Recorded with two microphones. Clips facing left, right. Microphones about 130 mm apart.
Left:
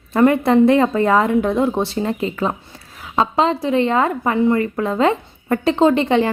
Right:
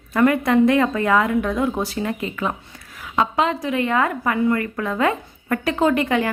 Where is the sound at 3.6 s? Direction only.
30° left (ahead or behind).